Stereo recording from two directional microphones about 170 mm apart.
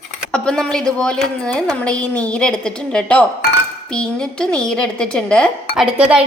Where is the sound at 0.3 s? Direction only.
5° left (ahead or behind).